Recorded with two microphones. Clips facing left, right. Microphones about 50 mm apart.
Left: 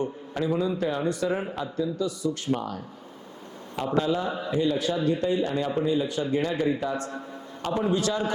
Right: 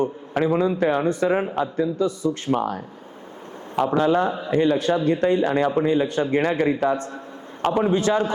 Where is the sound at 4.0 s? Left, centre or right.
Right.